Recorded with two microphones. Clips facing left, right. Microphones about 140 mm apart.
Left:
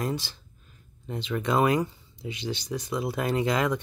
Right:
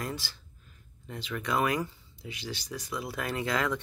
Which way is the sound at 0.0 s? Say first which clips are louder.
Left 6 dB; 20° left (ahead or behind).